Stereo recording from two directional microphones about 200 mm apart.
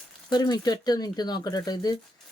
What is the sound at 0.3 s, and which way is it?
Speech, 20° left (ahead or behind).